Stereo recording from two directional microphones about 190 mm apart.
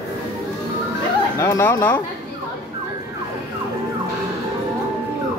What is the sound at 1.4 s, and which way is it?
Speech, 15° left (ahead or behind).